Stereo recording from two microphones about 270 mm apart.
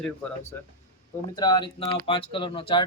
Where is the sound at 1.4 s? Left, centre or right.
Centre.